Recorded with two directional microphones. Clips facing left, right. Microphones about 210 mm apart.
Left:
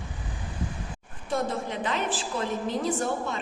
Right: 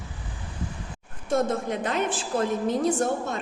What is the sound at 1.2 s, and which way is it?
A woman's voice, 45° right (ahead or behind).